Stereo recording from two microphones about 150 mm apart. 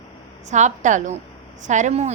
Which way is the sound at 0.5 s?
55° right (ahead or behind).